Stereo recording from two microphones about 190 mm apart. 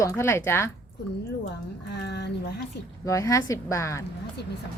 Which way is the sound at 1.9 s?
60° left (ahead or behind).